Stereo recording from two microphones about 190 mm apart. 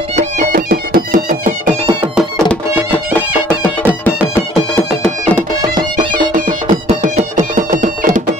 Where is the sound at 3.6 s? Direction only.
10° left (ahead or behind).